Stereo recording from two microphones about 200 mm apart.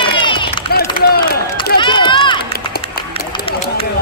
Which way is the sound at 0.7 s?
50° left (ahead or behind).